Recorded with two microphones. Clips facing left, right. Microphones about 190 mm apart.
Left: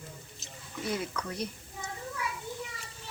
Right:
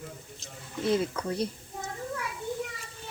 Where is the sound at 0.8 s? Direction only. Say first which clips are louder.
Right 7 dB; 25° right (ahead or behind).